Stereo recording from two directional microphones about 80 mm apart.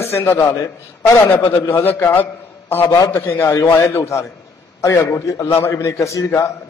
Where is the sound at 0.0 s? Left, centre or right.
Left.